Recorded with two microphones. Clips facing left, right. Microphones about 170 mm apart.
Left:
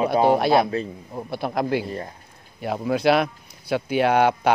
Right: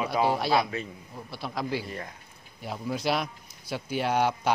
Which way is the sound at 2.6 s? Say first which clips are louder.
Left 9 dB; 65° left (ahead or behind).